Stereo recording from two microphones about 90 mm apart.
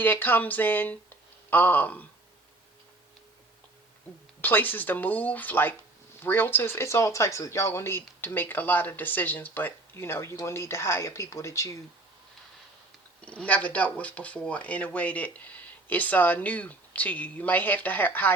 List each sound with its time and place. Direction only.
0.0 s speech: 20° left (ahead or behind)
4.4 s speech: 20° left (ahead or behind)
13.2 s speech: 15° left (ahead or behind)